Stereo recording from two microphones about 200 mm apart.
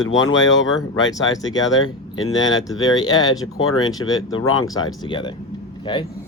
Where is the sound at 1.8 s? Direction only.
80° left.